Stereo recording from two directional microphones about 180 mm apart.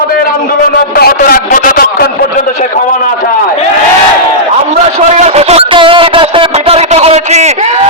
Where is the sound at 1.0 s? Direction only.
55° left (ahead or behind).